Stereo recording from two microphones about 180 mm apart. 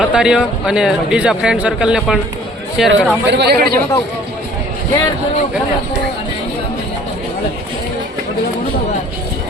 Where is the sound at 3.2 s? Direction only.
70° right (ahead or behind).